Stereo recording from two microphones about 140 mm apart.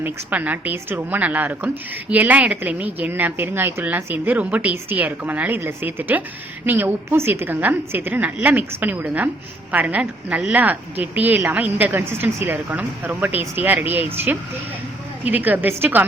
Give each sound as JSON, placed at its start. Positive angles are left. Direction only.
{"t": 0.0, "sound": "a woman's voice", "side_deg": -10}